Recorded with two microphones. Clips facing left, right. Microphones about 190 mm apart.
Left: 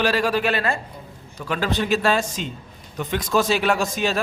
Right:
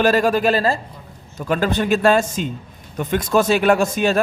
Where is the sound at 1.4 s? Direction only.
45° right (ahead or behind).